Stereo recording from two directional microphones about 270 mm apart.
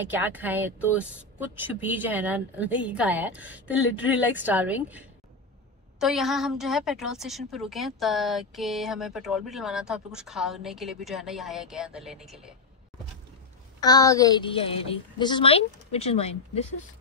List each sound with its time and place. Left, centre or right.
0.0 s a woman's voice: centre
13.7 s a woman's voice: centre